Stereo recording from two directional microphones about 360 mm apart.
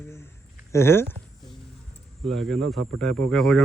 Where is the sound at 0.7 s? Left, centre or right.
Centre.